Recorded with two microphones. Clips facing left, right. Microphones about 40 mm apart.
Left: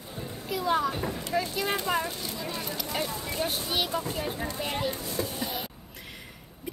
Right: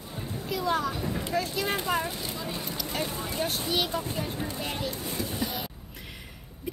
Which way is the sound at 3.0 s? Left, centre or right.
Right.